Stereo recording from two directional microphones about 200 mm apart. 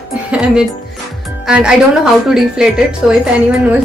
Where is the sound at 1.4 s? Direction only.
5° right (ahead or behind).